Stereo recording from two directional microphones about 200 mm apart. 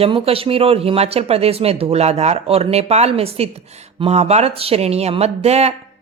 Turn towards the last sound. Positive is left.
turn(degrees=-30)  # may be behind; listen again after turning